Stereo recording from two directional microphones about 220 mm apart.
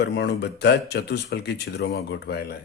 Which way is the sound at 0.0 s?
50° left (ahead or behind).